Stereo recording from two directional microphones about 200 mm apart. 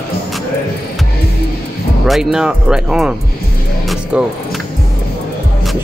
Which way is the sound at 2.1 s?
Centre (ahead or behind).